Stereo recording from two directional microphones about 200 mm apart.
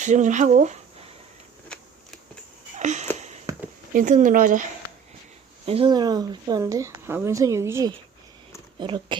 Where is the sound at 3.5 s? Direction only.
15° right (ahead or behind).